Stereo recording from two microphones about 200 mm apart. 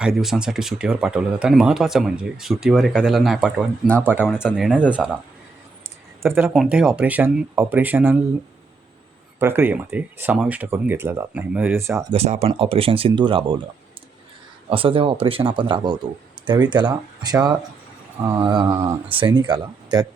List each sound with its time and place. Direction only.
0.0 s speech: centre (ahead or behind)
4.0 s speech: 5° right (ahead or behind)
6.2 s speech: 10° right (ahead or behind)
9.4 s speech: 10° right (ahead or behind)
12.1 s speech: 30° right (ahead or behind)
14.7 s speech: 25° right (ahead or behind)